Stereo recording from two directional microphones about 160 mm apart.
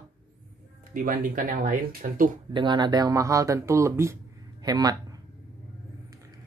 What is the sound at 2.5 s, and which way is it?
Speech, 30° right (ahead or behind).